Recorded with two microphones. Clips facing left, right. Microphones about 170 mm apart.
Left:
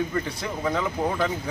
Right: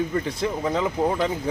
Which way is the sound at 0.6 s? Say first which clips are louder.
Right 1 dB; 20° right (ahead or behind).